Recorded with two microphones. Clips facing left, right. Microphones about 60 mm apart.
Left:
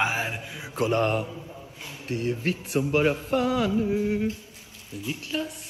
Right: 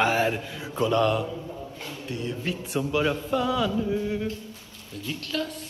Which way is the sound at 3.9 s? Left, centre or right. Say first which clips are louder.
Left 2 dB; centre.